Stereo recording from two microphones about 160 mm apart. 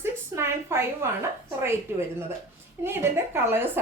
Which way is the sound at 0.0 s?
15° right (ahead or behind).